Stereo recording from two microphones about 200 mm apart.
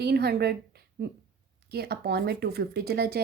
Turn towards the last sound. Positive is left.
turn(degrees=-50)  # may be behind; listen again after turning